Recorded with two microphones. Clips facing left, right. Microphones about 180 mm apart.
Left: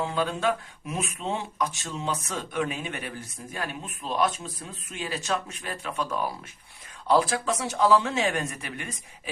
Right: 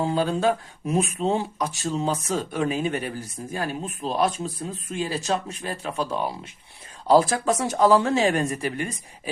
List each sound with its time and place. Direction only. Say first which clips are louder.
0.0 s speech: right 4 dB; 35° right (ahead or behind)
7.1 s speech: right 5 dB; 40° right (ahead or behind)